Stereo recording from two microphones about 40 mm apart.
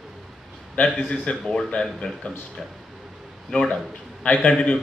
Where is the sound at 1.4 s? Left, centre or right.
Centre.